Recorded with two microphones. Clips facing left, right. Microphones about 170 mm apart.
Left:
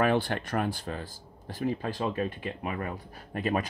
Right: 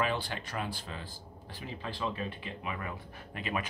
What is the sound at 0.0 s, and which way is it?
Speech, 55° left (ahead or behind).